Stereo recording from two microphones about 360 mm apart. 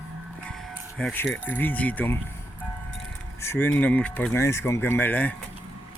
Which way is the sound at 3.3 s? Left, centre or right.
Centre.